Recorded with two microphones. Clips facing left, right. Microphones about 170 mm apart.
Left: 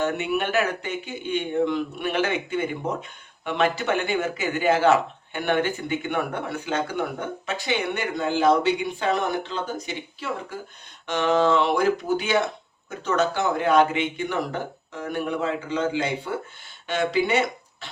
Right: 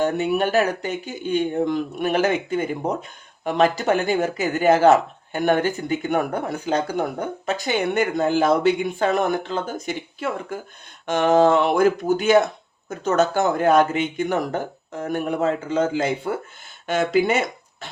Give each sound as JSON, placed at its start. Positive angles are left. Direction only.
{"t": 0.0, "sound": "speech", "side_deg": -35}